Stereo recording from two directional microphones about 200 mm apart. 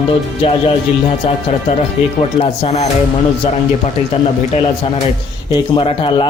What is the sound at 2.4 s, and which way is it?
Speech, 35° left (ahead or behind).